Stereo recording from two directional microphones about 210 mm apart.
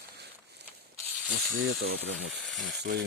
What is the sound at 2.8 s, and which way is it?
Speech, 50° right (ahead or behind).